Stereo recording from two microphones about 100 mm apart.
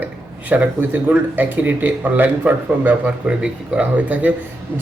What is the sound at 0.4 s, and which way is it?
Speech, 15° right (ahead or behind).